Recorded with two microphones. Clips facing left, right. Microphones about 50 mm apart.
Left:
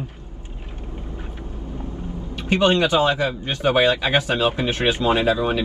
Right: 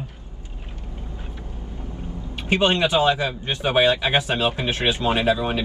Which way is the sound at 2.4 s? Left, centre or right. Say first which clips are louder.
Left 2 dB; right.